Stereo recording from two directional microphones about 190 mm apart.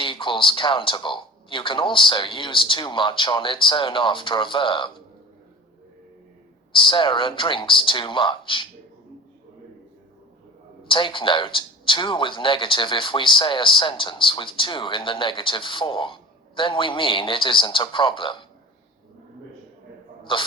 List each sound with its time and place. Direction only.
0.0 s speech: 25° left (ahead or behind)
6.7 s speech: 25° left (ahead or behind)
10.8 s speech: 25° left (ahead or behind)
20.3 s speech: 25° left (ahead or behind)